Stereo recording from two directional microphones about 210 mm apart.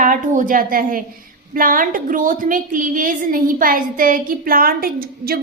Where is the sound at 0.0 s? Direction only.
40° right (ahead or behind).